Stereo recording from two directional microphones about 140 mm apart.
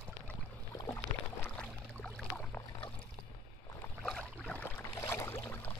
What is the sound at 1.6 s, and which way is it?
Boat, 10° left (ahead or behind).